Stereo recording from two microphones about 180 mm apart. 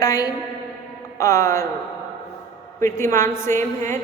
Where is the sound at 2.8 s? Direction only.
15° left (ahead or behind).